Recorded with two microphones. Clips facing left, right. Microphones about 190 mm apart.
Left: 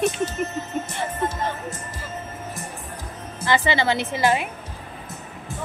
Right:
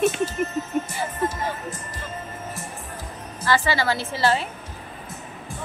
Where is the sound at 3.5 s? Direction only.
20° left (ahead or behind).